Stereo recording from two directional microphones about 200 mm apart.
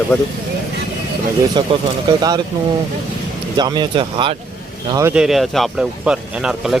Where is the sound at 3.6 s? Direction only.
20° right (ahead or behind).